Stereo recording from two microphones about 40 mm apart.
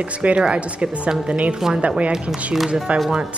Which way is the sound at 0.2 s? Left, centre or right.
Right.